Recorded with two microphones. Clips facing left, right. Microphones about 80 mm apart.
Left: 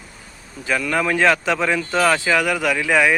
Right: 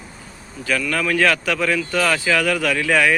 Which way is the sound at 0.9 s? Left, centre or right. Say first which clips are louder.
Left 2 dB; left.